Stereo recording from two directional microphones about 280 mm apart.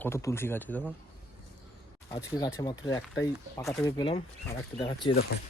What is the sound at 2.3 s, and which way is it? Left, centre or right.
Speech, centre.